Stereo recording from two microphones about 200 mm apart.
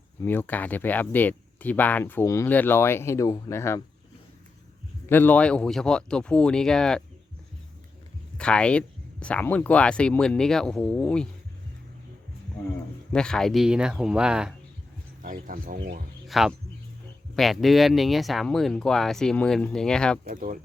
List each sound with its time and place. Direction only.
0.2 s speech: 10° left (ahead or behind)
5.0 s speech: 10° left (ahead or behind)
8.4 s speech: 5° left (ahead or behind)
13.1 s speech: 5° left (ahead or behind)
15.2 s speech: 40° right (ahead or behind)
16.2 s speech: centre (ahead or behind)
20.2 s speech: 45° right (ahead or behind)